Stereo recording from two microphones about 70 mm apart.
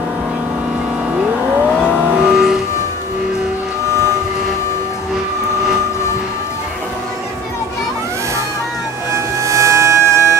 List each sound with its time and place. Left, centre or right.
1.9 s vehicle: centre
9.1 s music: right